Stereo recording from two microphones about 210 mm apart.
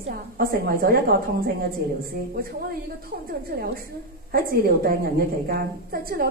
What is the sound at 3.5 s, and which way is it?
A woman's voice, 45° right (ahead or behind).